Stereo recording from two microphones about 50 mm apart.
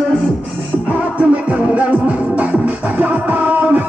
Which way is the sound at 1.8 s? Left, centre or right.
Right.